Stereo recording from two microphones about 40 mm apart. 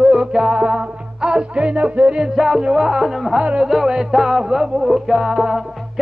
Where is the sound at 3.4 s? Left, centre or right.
Right.